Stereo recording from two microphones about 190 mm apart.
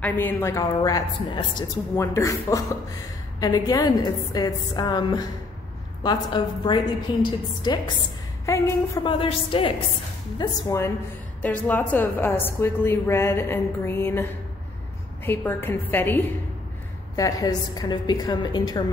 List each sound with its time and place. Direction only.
0.0 s a woman's voice: 10° left (ahead or behind)
9.0 s a woman's voice: 25° left (ahead or behind)
10.4 s a woman's voice: 15° left (ahead or behind)